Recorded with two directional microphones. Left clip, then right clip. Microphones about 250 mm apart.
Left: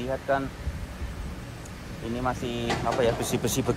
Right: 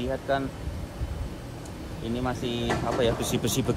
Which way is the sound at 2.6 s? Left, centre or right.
Centre.